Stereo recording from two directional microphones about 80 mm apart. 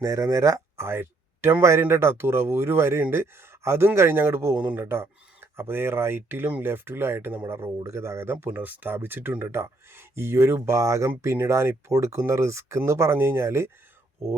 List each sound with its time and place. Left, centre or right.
0.0 s speech: right
0.9 s speech: right